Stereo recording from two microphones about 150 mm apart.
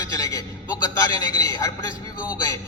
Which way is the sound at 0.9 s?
20° left (ahead or behind).